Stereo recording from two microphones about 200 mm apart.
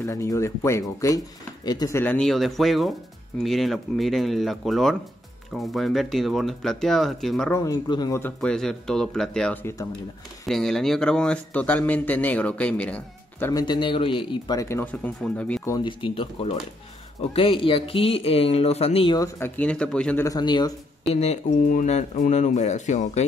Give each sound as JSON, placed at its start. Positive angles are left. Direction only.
{"t": 0.0, "sound": "a man's voice", "side_deg": 15}
{"t": 7.5, "sound": "a man's voice", "side_deg": 15}
{"t": 8.4, "sound": "a man's voice", "side_deg": 5}
{"t": 13.5, "sound": "a man's voice", "side_deg": 20}
{"t": 15.7, "sound": "speech", "side_deg": 25}
{"t": 19.1, "sound": "a man's voice", "side_deg": 15}
{"t": 20.2, "sound": "speech", "side_deg": 20}
{"t": 21.2, "sound": "speech", "side_deg": 35}